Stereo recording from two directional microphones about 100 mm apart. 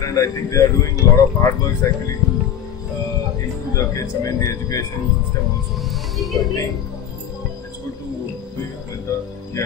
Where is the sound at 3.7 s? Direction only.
35° left (ahead or behind).